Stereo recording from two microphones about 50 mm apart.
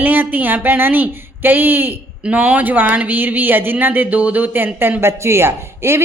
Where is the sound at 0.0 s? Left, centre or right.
Right.